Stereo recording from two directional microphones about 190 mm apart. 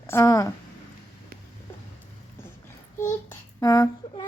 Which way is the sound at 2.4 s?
15° left (ahead or behind).